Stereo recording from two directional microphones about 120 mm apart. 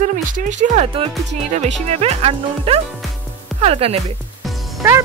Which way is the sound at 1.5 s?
75° right (ahead or behind).